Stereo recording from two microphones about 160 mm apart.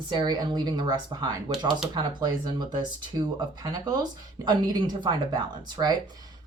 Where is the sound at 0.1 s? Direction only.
25° right (ahead or behind).